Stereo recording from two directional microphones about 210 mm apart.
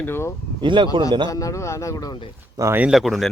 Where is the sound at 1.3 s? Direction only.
15° left (ahead or behind).